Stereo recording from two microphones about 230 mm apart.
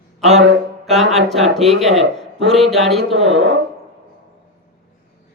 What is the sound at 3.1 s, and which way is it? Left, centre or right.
Speech, right.